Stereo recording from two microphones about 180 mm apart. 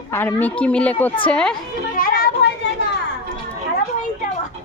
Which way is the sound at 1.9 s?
55° left (ahead or behind).